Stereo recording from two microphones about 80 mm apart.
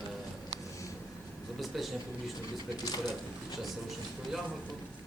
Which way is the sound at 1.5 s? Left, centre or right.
Centre.